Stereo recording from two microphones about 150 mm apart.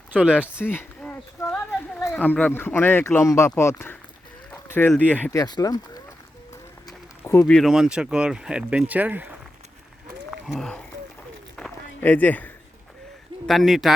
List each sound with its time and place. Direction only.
0.1 s speech: 10° right (ahead or behind)
0.6 s a sound: 15° left (ahead or behind)
2.0 s speech: 15° left (ahead or behind)
5.4 s speech: 25° left (ahead or behind)
7.4 s speech: 5° left (ahead or behind)
10.3 s speech: centre (ahead or behind)
11.5 s run: 5° left (ahead or behind)
13.5 s speech: centre (ahead or behind)